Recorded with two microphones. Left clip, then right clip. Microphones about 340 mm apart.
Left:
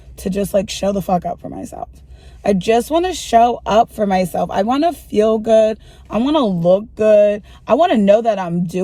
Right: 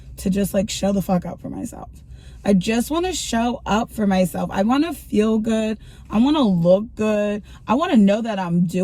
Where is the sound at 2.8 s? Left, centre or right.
Centre.